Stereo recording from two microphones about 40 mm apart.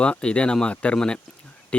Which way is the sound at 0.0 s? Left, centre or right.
Left.